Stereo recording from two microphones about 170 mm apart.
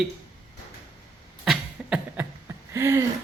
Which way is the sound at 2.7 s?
15° right (ahead or behind).